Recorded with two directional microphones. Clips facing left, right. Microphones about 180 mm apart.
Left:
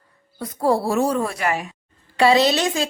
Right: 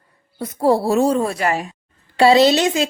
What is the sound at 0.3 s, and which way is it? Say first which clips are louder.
A woman's voice: right 3 dB; 25° right (ahead or behind).